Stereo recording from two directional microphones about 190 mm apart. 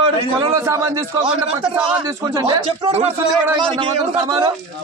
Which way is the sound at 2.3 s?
25° right (ahead or behind).